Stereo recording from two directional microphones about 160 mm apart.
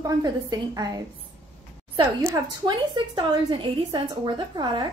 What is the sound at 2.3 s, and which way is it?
A woman's voice, 25° right (ahead or behind).